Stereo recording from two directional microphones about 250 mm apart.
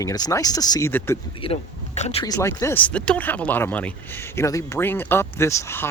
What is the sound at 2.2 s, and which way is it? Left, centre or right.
Speech, centre.